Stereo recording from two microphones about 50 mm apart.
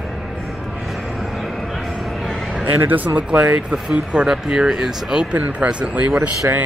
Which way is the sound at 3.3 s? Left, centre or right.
Right.